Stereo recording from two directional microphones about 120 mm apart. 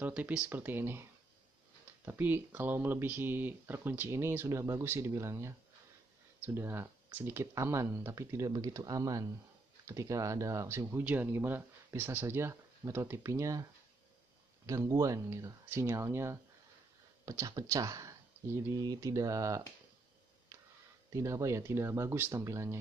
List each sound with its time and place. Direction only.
0.0 s speech: 10° right (ahead or behind)
2.0 s speech: 15° right (ahead or behind)
14.7 s speech: 25° right (ahead or behind)
21.1 s speech: 25° right (ahead or behind)